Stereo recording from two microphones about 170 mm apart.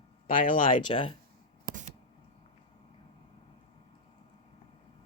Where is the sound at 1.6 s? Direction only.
50° right (ahead or behind).